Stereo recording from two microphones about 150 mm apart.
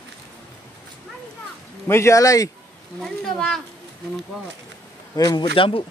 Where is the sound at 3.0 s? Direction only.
Centre (ahead or behind).